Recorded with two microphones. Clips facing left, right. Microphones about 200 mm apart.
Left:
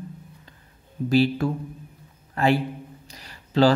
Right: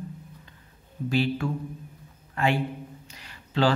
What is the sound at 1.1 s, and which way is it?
A man's voice, 35° left (ahead or behind).